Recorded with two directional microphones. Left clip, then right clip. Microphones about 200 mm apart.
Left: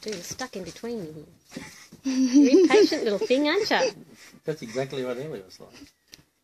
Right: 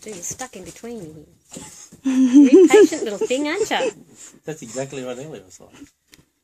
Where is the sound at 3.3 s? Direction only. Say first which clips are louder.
Right 1 dB; 65° left (ahead or behind).